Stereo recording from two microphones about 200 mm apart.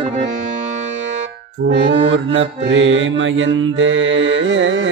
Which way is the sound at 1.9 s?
70° right (ahead or behind).